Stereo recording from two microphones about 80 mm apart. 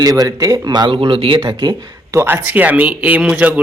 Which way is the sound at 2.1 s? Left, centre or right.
Right.